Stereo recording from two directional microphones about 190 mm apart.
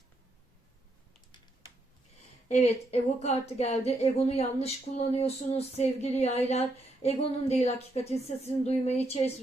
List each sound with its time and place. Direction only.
2.5 s speech: 35° left (ahead or behind)